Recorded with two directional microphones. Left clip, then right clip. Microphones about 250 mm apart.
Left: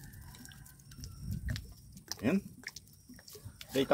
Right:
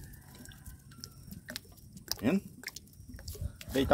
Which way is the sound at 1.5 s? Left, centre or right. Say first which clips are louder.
Right 5 dB; right.